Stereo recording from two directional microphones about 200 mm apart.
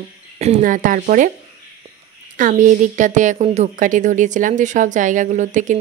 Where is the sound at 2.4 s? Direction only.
40° right (ahead or behind).